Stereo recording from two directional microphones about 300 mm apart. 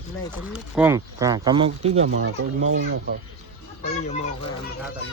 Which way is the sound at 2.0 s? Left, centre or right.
Right.